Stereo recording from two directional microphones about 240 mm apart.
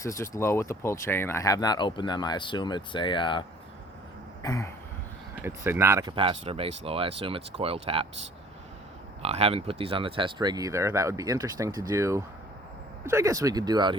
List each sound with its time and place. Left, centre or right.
0.0 s speech: centre
4.4 s speech: centre
5.4 s speech: centre
9.2 s speech: right